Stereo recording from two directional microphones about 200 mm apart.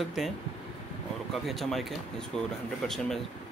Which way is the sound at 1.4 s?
Centre (ahead or behind).